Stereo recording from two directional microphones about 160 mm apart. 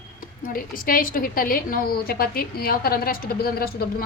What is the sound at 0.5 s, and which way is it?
A woman's voice, 60° left (ahead or behind).